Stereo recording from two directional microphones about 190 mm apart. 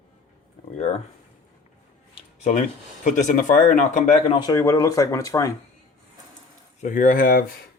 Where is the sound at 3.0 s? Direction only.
40° left (ahead or behind).